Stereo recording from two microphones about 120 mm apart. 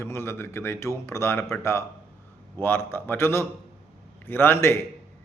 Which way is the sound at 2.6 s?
20° left (ahead or behind).